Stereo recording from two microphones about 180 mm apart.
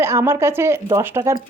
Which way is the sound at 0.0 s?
15° right (ahead or behind).